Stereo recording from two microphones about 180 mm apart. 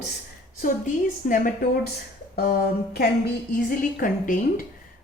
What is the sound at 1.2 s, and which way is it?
Speech, 50° left (ahead or behind).